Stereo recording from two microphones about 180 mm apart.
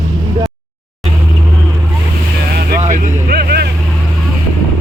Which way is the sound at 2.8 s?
50° right (ahead or behind).